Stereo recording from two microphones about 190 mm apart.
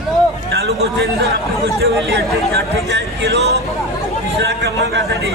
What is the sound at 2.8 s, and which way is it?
A man's voice, 65° right (ahead or behind).